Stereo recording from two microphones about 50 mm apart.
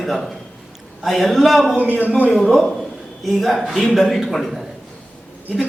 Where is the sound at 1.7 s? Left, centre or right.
Right.